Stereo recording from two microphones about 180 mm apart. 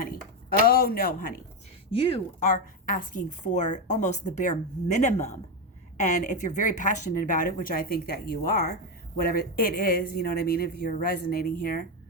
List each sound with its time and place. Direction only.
0.7 s a man's voice: 55° left (ahead or behind)
2.5 s a woman's voice: 50° left (ahead or behind)